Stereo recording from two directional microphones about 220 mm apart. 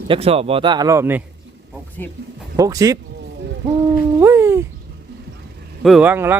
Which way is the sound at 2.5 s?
15° right (ahead or behind).